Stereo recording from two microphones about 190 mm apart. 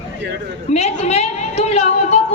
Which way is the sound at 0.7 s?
35° left (ahead or behind).